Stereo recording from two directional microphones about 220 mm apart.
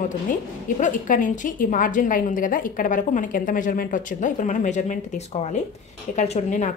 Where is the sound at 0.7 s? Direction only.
35° left (ahead or behind).